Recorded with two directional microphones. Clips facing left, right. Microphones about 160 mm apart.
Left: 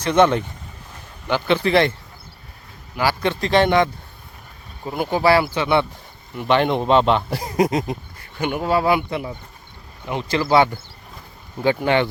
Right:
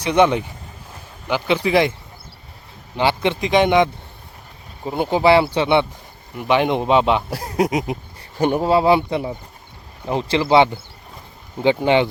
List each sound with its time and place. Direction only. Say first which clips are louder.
0.0 s speech: even; 15° right (ahead or behind)
2.9 s speech: right 2 dB; 25° right (ahead or behind)
6.3 s speech: even; 10° right (ahead or behind)
8.2 s speech: right 6 dB; 35° right (ahead or behind); by 12.0 s 20° right (ahead or behind)